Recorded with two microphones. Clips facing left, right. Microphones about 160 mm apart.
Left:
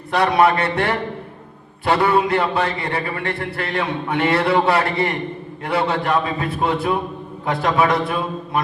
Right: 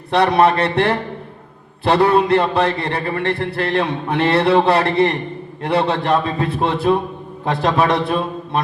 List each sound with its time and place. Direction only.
0.1 s a man's voice: 30° right (ahead or behind)